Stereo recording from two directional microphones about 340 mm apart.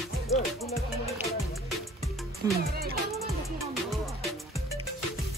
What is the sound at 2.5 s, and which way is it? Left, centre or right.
Music, right.